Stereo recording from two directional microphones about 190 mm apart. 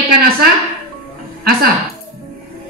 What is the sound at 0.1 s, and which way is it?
Speech, 50° right (ahead or behind).